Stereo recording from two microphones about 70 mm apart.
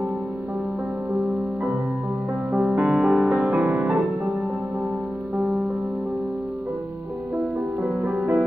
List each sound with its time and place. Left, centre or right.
2.8 s music: centre
7.8 s music: centre